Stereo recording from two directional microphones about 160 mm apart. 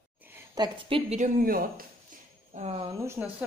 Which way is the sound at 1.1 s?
60° right (ahead or behind).